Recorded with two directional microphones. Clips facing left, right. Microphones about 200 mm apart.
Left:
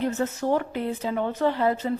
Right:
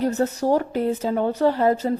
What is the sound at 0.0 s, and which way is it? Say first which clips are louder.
A woman's voice: right 4 dB; 40° right (ahead or behind).